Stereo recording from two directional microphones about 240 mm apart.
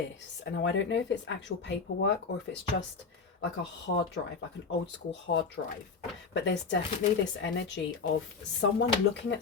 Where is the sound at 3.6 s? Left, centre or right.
Left.